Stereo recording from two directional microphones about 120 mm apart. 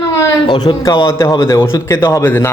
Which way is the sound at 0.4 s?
35° left (ahead or behind).